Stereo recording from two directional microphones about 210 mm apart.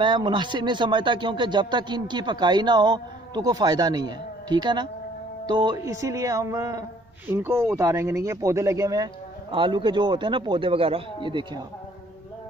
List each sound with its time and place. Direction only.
0.0 s speech: 20° right (ahead or behind)